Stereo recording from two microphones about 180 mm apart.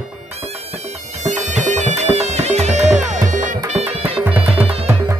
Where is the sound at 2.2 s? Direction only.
35° right (ahead or behind).